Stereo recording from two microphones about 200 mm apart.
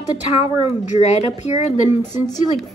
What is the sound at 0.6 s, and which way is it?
Speech, 35° left (ahead or behind).